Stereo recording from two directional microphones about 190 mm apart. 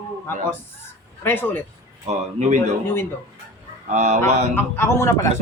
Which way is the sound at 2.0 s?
35° right (ahead or behind).